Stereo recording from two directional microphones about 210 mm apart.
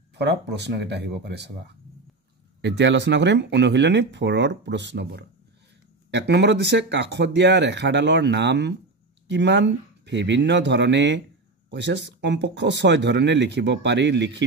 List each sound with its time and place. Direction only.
0.1 s speech: 55° right (ahead or behind)
2.6 s speech: 60° right (ahead or behind)